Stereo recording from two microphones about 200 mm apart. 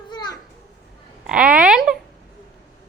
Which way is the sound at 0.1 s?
20° left (ahead or behind).